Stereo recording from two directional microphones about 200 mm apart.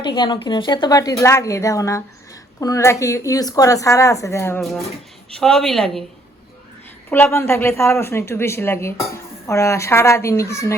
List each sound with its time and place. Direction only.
0.0 s a woman's voice: 25° left (ahead or behind); by 6.1 s centre (ahead or behind)
7.1 s speech: 10° left (ahead or behind)